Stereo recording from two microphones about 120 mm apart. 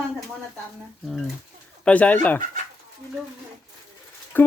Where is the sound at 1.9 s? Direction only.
10° left (ahead or behind).